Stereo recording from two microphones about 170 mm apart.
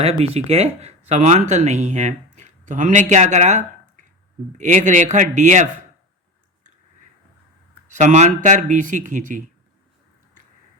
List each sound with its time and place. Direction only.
0.0 s a man's voice: 35° right (ahead or behind)
7.9 s a man's voice: 45° right (ahead or behind)